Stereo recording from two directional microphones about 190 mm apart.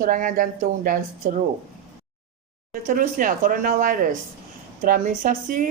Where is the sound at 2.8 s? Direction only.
45° right (ahead or behind).